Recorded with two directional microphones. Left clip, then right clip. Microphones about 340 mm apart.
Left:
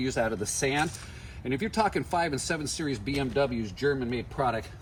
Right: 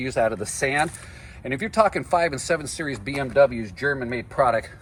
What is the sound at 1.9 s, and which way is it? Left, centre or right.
Speech, centre.